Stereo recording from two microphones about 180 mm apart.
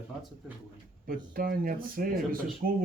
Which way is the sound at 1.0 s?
55° right (ahead or behind).